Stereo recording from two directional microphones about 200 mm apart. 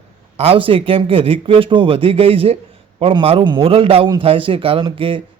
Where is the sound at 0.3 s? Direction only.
30° right (ahead or behind).